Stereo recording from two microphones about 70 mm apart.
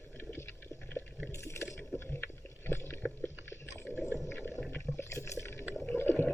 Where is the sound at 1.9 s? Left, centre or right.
Left.